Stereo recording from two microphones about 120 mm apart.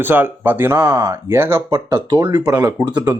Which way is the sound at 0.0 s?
15° right (ahead or behind).